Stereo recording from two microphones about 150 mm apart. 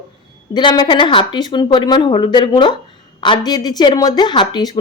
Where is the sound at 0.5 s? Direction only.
30° left (ahead or behind).